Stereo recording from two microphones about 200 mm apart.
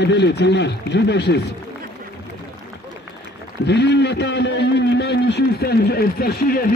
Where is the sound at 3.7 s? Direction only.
60° left (ahead or behind).